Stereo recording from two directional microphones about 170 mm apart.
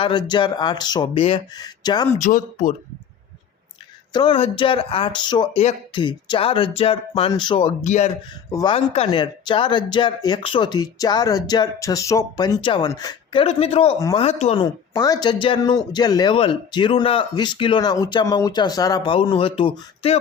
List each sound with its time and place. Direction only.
0.0 s speech: 30° left (ahead or behind)
2.2 s speech: 50° left (ahead or behind)
4.1 s speech: 30° left (ahead or behind)
8.4 s speech: 20° left (ahead or behind)
8.7 s speech: 35° left (ahead or behind)